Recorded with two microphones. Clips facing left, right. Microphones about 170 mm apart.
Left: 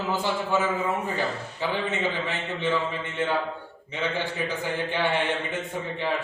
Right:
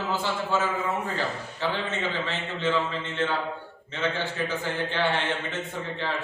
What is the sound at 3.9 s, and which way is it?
A man's voice, 15° left (ahead or behind).